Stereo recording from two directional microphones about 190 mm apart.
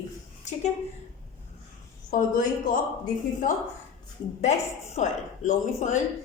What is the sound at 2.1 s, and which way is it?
A woman's voice, 45° left (ahead or behind).